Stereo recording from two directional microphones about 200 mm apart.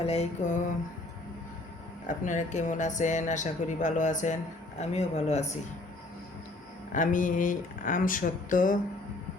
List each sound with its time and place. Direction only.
0.0 s speech: 30° left (ahead or behind)
2.0 s speech: 40° left (ahead or behind)
6.9 s speech: 40° left (ahead or behind)